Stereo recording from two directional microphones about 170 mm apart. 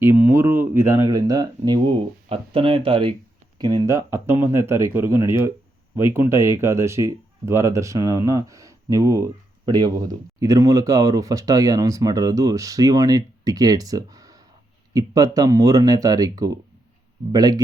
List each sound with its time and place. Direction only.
0.0 s speech: 15° right (ahead or behind)